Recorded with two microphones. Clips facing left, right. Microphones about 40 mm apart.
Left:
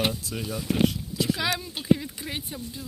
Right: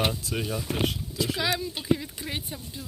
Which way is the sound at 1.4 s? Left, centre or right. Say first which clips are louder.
Even; left.